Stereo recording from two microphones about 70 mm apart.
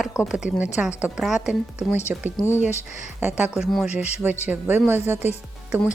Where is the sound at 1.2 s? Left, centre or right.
Centre.